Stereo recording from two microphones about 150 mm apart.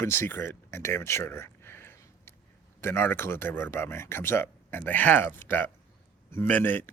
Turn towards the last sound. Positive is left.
turn(degrees=10)  # may be behind; listen again after turning